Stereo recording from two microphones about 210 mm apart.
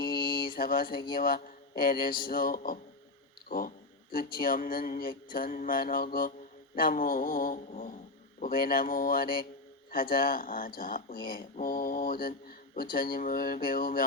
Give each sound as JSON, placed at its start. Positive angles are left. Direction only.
{"t": 0.0, "sound": "mantra", "side_deg": 45}
{"t": 1.1, "sound": "speech", "side_deg": 45}
{"t": 4.1, "sound": "speech", "side_deg": 45}
{"t": 6.7, "sound": "mantra", "side_deg": 40}
{"t": 8.4, "sound": "speech", "side_deg": 45}